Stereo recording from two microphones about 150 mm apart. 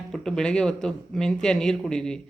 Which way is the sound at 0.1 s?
5° left (ahead or behind).